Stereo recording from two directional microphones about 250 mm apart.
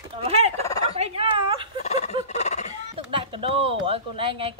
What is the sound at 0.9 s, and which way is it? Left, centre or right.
Turkey, right.